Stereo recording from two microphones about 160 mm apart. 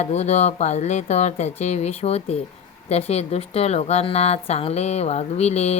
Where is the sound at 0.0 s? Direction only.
45° left (ahead or behind).